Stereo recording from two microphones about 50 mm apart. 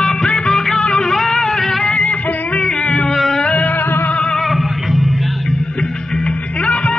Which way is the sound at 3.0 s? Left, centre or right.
Centre.